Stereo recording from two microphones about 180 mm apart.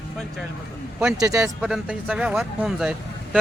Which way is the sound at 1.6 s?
5° right (ahead or behind).